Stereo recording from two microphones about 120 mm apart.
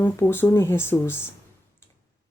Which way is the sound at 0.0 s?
20° left (ahead or behind).